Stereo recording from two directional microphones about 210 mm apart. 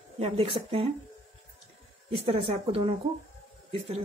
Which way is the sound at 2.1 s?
25° right (ahead or behind).